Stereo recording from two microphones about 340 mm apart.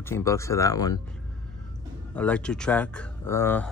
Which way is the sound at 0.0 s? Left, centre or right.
Centre.